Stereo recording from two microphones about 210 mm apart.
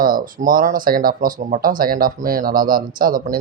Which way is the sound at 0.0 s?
40° right (ahead or behind).